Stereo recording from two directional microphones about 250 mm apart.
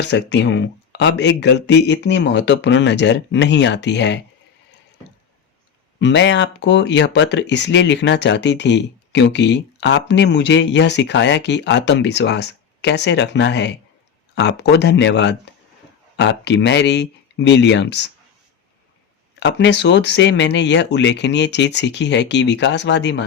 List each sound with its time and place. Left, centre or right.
0.0 s speech: left
6.0 s speech: left
19.4 s speech: left